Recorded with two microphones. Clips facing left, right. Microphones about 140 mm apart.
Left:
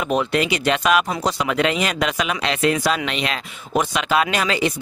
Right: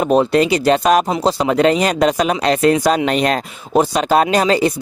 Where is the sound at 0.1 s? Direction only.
35° right (ahead or behind).